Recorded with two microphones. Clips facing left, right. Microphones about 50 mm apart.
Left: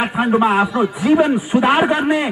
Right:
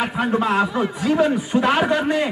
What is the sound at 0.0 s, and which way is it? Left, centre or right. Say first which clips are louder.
A man's voice: left 5 dB; centre.